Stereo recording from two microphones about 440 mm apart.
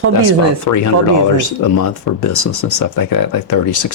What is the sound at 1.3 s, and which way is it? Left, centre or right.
Speech, left.